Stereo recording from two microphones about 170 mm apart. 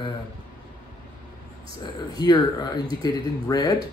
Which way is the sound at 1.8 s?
25° left (ahead or behind).